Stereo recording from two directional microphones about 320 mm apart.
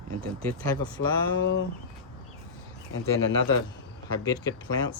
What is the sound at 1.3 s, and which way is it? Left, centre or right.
Speech, left.